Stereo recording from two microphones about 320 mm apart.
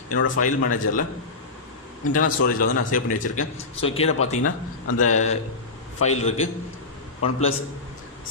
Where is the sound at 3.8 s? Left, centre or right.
Centre.